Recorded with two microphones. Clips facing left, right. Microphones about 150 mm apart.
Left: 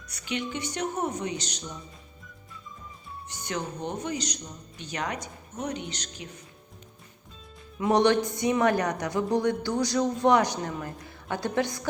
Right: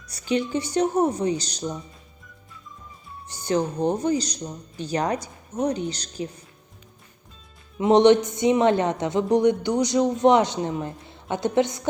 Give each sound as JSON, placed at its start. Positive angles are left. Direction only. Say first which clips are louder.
{"t": 0.1, "sound": "speech", "louder": "right 8 dB", "side_deg": -35}
{"t": 3.2, "sound": "speech", "louder": "right 10 dB", "side_deg": -30}
{"t": 7.8, "sound": "speech", "louder": "right 6 dB", "side_deg": -20}